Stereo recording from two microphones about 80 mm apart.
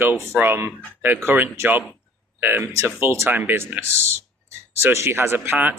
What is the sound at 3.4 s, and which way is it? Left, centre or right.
Speech, right.